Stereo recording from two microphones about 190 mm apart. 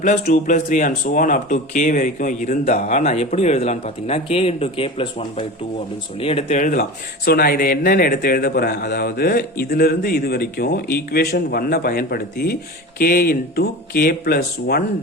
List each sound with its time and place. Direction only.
0.0 s a man's voice: 40° left (ahead or behind)